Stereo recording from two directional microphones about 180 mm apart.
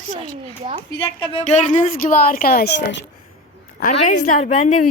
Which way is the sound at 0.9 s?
30° left (ahead or behind).